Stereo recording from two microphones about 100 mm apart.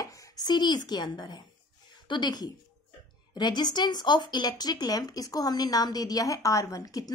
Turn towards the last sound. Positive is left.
turn(degrees=35)  # may be behind; listen again after turning